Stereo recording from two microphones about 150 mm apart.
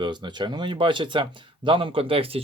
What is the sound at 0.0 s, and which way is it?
Speech, 30° right (ahead or behind).